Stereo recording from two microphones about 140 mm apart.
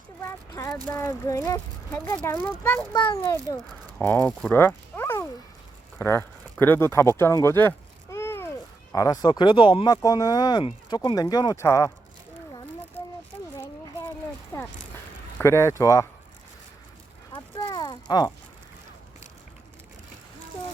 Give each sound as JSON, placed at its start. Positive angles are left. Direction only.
{"t": 0.2, "sound": "speech", "side_deg": 20}
{"t": 2.9, "sound": "a child's voice", "side_deg": 35}
{"t": 3.5, "sound": "speech", "side_deg": 25}
{"t": 4.0, "sound": "speech", "side_deg": 10}
{"t": 8.1, "sound": "a sound", "side_deg": 20}
{"t": 9.2, "sound": "speech", "side_deg": 30}
{"t": 15.4, "sound": "speech", "side_deg": 20}
{"t": 17.3, "sound": "clip-clop", "side_deg": 35}